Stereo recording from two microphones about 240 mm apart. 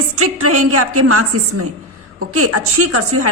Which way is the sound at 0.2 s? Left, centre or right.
Right.